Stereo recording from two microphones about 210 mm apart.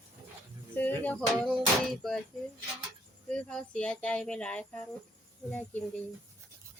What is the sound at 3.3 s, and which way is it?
Female singing, 5° left (ahead or behind).